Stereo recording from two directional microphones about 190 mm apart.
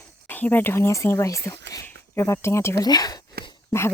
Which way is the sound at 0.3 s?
10° left (ahead or behind).